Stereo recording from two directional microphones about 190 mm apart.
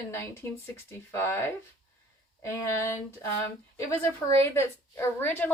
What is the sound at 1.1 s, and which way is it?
A woman's voice, 15° left (ahead or behind).